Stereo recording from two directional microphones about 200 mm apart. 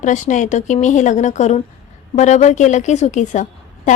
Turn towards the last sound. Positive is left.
turn(degrees=35)  # may be behind; listen again after turning